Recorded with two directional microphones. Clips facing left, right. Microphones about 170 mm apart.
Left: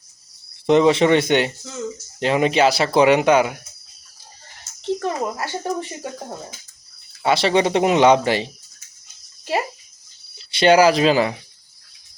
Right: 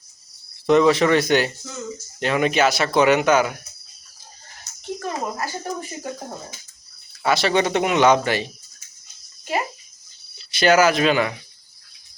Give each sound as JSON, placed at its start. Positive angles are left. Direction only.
{"t": 0.7, "sound": "speech", "side_deg": 25}
{"t": 4.8, "sound": "speech", "side_deg": 30}
{"t": 7.2, "sound": "speech", "side_deg": 25}
{"t": 10.5, "sound": "speech", "side_deg": 30}